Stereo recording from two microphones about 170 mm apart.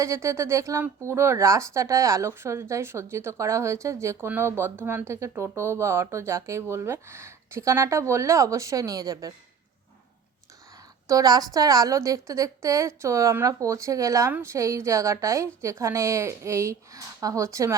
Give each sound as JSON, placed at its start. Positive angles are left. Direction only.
{"t": 0.0, "sound": "speech", "side_deg": -15}
{"t": 11.1, "sound": "speech", "side_deg": -20}